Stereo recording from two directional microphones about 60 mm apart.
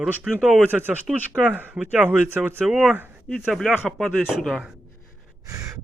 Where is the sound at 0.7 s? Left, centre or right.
Right.